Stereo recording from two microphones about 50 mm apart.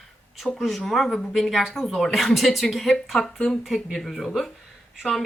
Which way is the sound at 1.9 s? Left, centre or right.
Centre.